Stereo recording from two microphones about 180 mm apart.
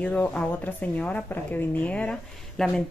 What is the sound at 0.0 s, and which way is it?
A woman's voice, 10° left (ahead or behind).